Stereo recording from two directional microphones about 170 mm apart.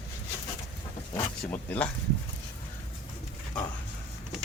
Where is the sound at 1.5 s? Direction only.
10° left (ahead or behind).